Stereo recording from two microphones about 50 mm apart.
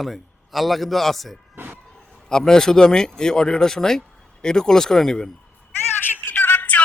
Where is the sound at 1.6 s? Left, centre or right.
Right.